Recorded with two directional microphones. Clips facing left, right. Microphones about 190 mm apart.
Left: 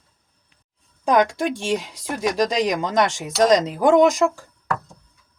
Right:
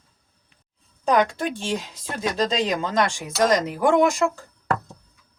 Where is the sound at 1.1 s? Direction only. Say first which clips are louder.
Left 2 dB; 15° left (ahead or behind).